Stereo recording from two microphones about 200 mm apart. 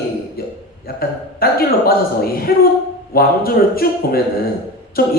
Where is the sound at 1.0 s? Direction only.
50° left (ahead or behind).